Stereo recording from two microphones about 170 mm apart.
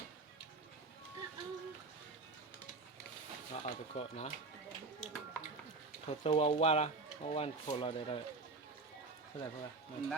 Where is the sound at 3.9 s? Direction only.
40° left (ahead or behind).